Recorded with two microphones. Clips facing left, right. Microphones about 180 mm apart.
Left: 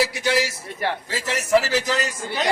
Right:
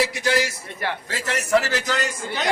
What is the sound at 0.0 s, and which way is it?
A man's voice, centre (ahead or behind).